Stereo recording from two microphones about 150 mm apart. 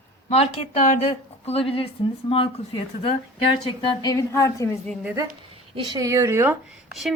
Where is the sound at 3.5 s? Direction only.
25° left (ahead or behind).